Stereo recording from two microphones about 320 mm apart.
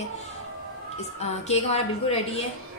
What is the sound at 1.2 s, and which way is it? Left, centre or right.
A woman's voice, centre.